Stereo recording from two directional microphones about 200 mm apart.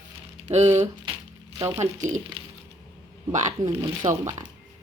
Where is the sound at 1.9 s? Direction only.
40° right (ahead or behind).